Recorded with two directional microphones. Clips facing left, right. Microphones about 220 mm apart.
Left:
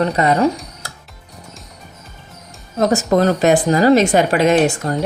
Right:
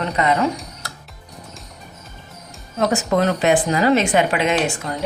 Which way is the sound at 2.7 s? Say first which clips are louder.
Left 4 dB; 40° left (ahead or behind).